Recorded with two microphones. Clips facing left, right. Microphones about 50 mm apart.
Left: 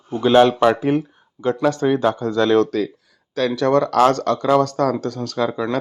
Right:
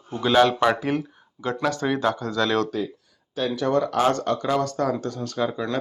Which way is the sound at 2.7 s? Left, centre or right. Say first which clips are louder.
Left 6 dB; left.